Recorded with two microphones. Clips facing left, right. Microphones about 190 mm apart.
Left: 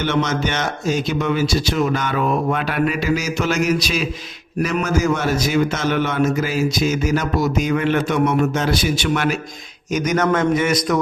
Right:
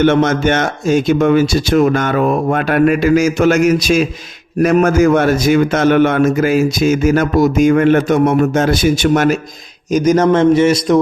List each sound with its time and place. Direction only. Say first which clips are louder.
0.0 s a man's voice: right 8 dB; 50° right (ahead or behind)
9.9 s a man's voice: right 7 dB; 30° right (ahead or behind)